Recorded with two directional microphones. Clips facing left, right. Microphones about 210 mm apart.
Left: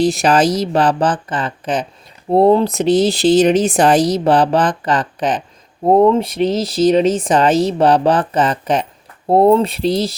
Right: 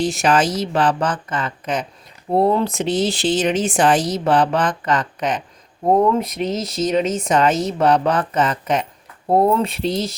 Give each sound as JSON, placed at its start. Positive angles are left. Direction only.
{"t": 0.0, "sound": "speech", "side_deg": 35}
{"t": 5.8, "sound": "speech", "side_deg": 25}